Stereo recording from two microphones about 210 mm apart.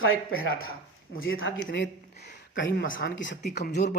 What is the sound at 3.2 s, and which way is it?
Speech, 55° left (ahead or behind).